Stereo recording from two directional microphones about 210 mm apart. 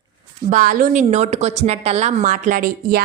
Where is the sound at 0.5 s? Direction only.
40° right (ahead or behind).